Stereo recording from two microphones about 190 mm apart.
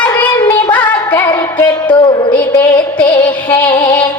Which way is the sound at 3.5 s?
10° left (ahead or behind).